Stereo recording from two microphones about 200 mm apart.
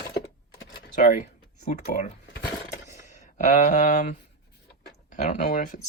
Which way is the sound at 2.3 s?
55° left (ahead or behind).